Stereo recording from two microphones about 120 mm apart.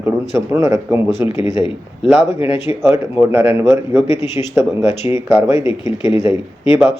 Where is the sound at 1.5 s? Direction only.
50° left (ahead or behind).